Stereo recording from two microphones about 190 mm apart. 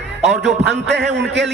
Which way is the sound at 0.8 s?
65° right (ahead or behind).